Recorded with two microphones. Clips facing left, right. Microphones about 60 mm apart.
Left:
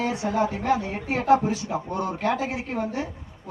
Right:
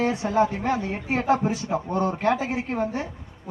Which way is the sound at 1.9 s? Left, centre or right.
Right.